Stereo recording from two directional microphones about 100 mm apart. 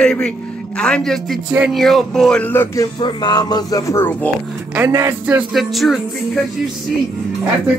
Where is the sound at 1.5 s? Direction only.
10° right (ahead or behind).